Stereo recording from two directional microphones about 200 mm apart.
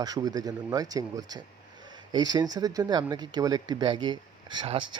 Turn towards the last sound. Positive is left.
turn(degrees=-25)  # may be behind; listen again after turning